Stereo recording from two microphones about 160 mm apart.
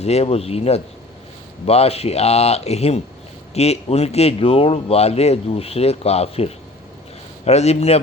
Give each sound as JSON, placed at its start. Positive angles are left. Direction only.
{"t": 0.0, "sound": "speech", "side_deg": 40}